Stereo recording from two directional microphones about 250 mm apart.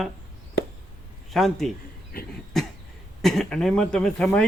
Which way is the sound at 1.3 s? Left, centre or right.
Centre.